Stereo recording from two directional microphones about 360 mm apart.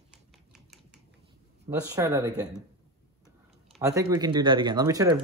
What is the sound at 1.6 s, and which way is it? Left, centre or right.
Speech, centre.